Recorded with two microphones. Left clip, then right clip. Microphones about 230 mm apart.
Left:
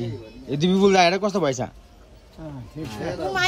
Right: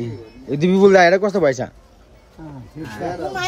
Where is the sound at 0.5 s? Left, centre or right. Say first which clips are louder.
Right 6 dB; centre.